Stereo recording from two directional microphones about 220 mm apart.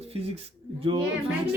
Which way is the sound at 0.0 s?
25° right (ahead or behind).